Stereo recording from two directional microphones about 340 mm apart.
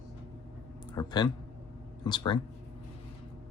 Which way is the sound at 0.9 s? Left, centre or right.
Centre.